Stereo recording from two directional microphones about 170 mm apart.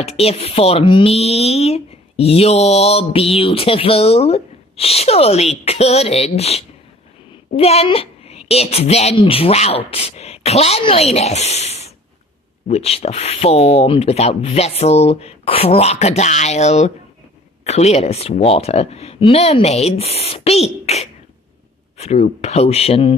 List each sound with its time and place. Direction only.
0.0 s speech: 35° left (ahead or behind)